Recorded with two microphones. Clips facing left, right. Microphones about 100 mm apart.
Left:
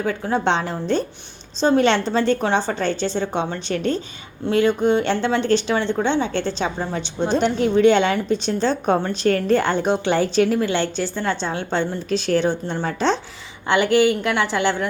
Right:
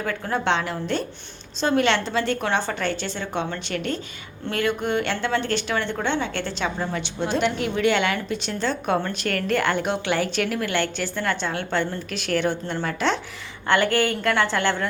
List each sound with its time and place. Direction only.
0.0 s a woman's voice: 20° left (ahead or behind); by 2.2 s 35° left (ahead or behind)
2.3 s a woman's voice: 25° left (ahead or behind)
13.7 s a woman's voice: 15° left (ahead or behind)